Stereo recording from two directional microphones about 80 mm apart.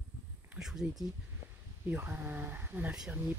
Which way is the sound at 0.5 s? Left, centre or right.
Centre.